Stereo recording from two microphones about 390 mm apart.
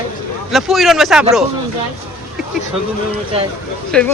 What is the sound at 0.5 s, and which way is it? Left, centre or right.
Speech, centre.